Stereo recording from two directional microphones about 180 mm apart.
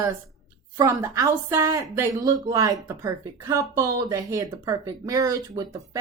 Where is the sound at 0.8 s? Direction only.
20° right (ahead or behind).